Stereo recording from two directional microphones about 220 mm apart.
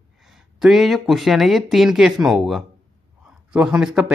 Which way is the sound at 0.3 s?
Centre (ahead or behind).